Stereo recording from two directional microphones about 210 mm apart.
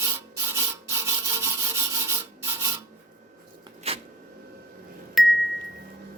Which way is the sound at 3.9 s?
30° right (ahead or behind).